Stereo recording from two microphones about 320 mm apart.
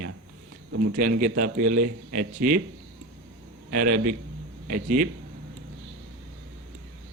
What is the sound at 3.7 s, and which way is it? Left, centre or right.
A man's voice, right.